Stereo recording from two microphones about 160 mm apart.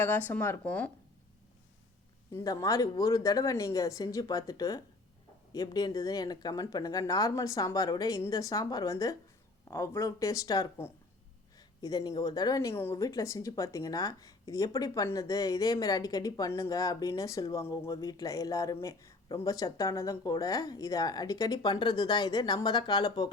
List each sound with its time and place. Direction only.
0.0 s speech: 10° left (ahead or behind)
2.3 s speech: 20° left (ahead or behind)